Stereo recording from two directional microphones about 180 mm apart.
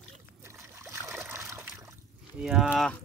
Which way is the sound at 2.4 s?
Centre (ahead or behind).